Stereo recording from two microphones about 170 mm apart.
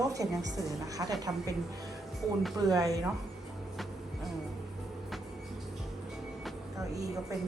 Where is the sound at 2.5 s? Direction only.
20° right (ahead or behind).